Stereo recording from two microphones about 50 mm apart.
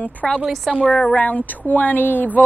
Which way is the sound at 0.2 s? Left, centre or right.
Left.